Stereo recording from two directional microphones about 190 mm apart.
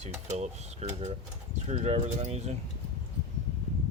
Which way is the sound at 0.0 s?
35° right (ahead or behind).